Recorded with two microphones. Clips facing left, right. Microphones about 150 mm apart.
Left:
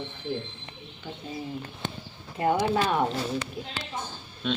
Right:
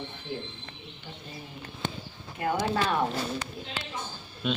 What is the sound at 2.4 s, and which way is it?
Speech, 30° left (ahead or behind).